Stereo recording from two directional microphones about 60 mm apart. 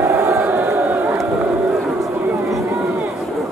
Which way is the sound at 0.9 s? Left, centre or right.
Right.